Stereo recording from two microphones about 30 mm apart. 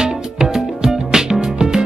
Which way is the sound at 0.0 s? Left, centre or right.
Right.